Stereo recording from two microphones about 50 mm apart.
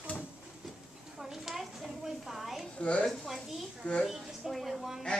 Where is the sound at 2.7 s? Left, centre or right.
Left.